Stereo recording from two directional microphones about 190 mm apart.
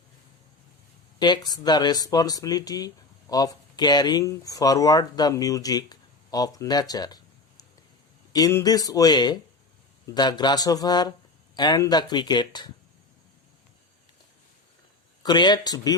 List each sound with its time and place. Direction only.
1.2 s speech: 20° left (ahead or behind)
15.2 s speech: 25° left (ahead or behind)